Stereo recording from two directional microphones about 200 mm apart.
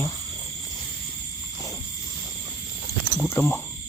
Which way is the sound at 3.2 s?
10° left (ahead or behind).